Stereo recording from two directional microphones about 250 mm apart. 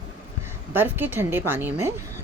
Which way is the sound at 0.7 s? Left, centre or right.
Centre.